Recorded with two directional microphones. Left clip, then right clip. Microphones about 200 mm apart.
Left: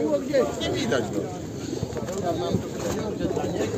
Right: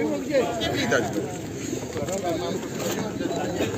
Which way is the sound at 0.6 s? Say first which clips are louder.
Right 2 dB; 60° left (ahead or behind).